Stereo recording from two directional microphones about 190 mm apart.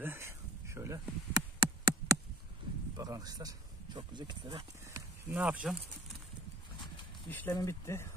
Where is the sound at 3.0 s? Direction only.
20° right (ahead or behind).